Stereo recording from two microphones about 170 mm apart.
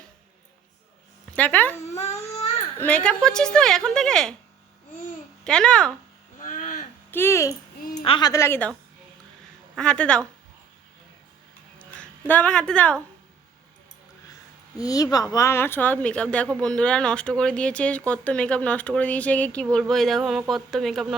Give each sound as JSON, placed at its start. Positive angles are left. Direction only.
{"t": 1.3, "sound": "speech", "side_deg": 10}
{"t": 1.9, "sound": "baby cry", "side_deg": 40}
{"t": 2.7, "sound": "speech", "side_deg": 10}
{"t": 5.5, "sound": "speech", "side_deg": 5}
{"t": 6.4, "sound": "a sound", "side_deg": 45}
{"t": 7.1, "sound": "speech", "side_deg": 15}
{"t": 8.0, "sound": "a woman's voice", "side_deg": 30}
{"t": 8.3, "sound": "speech", "side_deg": 15}
{"t": 9.7, "sound": "speech", "side_deg": 5}
{"t": 11.8, "sound": "speech", "side_deg": 10}
{"t": 14.8, "sound": "speech", "side_deg": 20}